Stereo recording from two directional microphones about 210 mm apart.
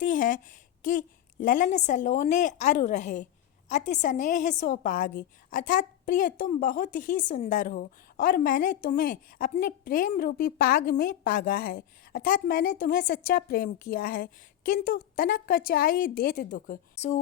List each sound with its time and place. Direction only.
0.0 s a woman's voice: 40° left (ahead or behind)